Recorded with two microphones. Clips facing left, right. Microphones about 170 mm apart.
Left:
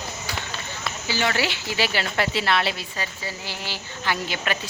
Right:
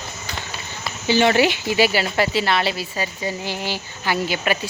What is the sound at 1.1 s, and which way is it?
Speech, 20° right (ahead or behind).